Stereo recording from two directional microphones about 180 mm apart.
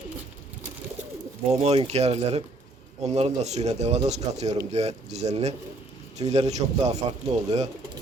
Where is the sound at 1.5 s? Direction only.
35° right (ahead or behind).